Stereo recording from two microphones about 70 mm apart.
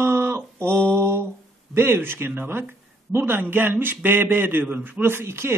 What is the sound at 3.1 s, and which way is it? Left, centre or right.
A man's voice, right.